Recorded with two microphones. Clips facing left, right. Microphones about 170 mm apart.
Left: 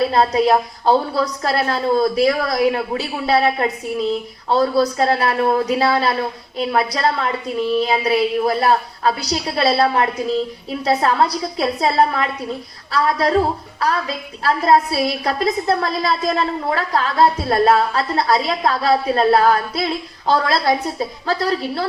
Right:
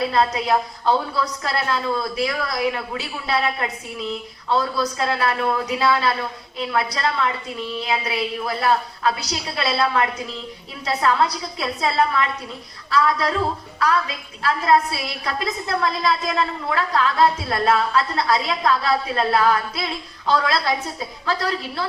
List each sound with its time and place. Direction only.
0.1 s a woman's voice: 35° left (ahead or behind)